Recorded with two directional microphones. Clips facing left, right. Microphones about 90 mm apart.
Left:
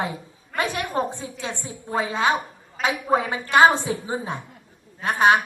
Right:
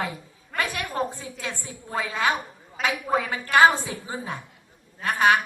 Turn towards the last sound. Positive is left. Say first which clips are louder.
# left 2 dB
turn(degrees=25)  # may be behind; listen again after turning